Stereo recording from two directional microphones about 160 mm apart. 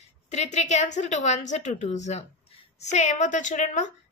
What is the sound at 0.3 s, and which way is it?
A woman's voice, 45° left (ahead or behind).